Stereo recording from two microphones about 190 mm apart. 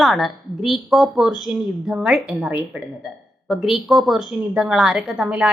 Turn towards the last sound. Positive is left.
turn(degrees=-5)  # may be behind; listen again after turning